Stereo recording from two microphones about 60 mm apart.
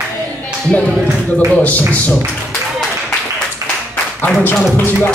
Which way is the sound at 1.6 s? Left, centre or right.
Left.